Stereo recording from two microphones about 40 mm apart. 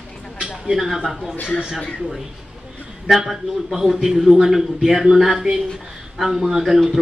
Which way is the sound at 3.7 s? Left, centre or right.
Centre.